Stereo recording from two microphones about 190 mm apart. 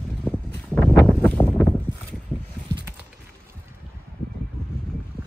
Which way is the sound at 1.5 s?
5° left (ahead or behind).